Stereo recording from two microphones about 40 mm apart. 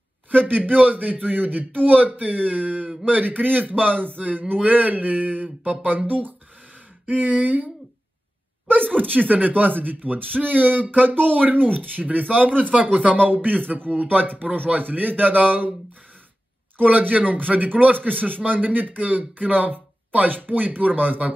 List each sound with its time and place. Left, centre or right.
0.3 s speech: right
8.8 s speech: right
12.7 s speech: right
16.7 s speech: right